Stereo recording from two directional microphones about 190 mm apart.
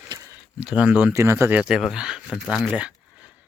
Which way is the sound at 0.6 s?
5° right (ahead or behind).